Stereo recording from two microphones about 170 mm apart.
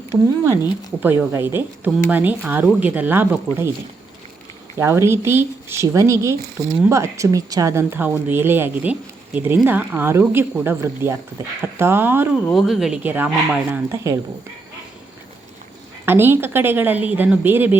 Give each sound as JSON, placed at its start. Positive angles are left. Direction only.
{"t": 1.0, "sound": "a woman's voice", "side_deg": -15}
{"t": 4.8, "sound": "a woman's voice", "side_deg": -15}
{"t": 12.5, "sound": "a woman's voice", "side_deg": 0}
{"t": 16.0, "sound": "a woman's voice", "side_deg": -10}